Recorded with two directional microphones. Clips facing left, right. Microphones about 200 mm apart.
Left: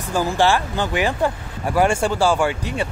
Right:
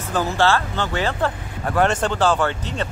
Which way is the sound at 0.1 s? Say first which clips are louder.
Left 1 dB; 10° left (ahead or behind).